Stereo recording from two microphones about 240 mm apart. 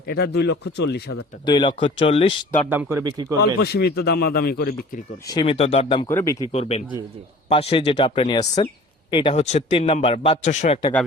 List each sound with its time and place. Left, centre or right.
0.1 s speech: left
1.5 s a man's voice: centre
2.6 s speech: centre
3.6 s speech: left
5.3 s a man's voice: left
6.1 s a man's voice: centre
6.5 s a man's voice: left